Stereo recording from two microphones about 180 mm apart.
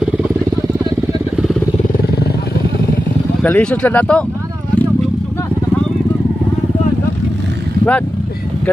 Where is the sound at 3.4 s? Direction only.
5° left (ahead or behind).